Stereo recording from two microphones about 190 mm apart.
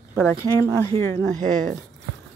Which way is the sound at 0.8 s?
15° left (ahead or behind).